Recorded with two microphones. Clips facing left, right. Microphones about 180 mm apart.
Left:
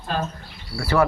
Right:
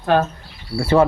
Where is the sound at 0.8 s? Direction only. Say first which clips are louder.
Right 5 dB; 25° right (ahead or behind).